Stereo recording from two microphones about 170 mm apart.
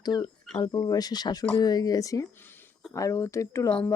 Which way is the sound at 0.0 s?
25° left (ahead or behind).